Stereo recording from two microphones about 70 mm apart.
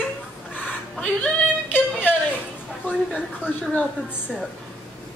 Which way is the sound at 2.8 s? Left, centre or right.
Left.